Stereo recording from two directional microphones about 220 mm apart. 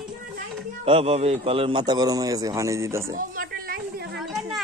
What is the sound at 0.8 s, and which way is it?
A man's voice, 25° right (ahead or behind).